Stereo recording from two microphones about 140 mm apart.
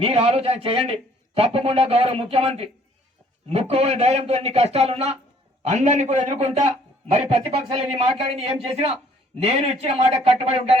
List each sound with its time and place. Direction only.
0.0 s a man's voice: 45° right (ahead or behind)
7.7 s a man's voice: 45° right (ahead or behind)